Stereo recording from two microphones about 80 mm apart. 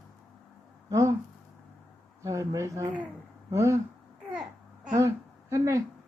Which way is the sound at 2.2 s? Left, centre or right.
Right.